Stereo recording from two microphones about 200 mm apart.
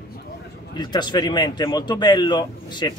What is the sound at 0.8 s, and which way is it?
Speech, 20° left (ahead or behind).